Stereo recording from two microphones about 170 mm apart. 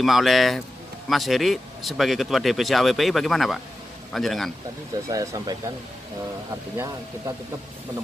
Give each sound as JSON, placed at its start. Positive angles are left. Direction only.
{"t": 0.0, "sound": "speech", "side_deg": 0}
{"t": 5.0, "sound": "speech", "side_deg": -20}